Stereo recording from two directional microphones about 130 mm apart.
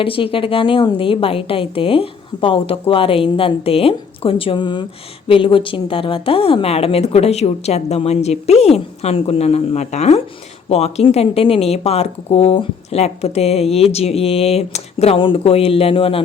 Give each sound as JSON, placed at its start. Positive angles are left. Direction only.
{"t": 0.0, "sound": "speech", "side_deg": 45}